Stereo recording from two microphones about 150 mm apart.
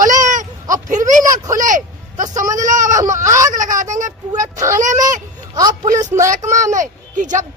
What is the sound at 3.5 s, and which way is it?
Speech, 60° right (ahead or behind).